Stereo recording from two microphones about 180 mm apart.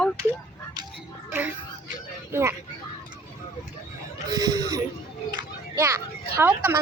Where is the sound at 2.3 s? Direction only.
15° right (ahead or behind).